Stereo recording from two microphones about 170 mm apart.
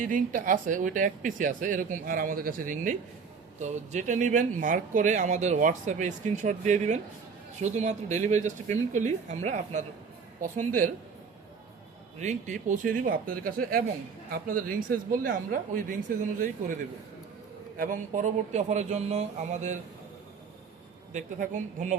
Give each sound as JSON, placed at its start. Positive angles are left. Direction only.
{"t": 0.0, "sound": "speech", "side_deg": -50}
{"t": 12.2, "sound": "speech", "side_deg": -45}
{"t": 17.7, "sound": "speech", "side_deg": -50}
{"t": 21.1, "sound": "speech", "side_deg": -50}